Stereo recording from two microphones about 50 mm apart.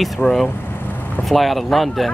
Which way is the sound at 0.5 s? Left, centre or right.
Left.